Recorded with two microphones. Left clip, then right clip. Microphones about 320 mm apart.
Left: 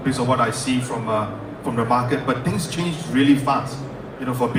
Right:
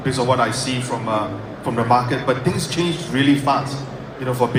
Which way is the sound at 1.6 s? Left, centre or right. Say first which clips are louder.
Right 3 dB; right.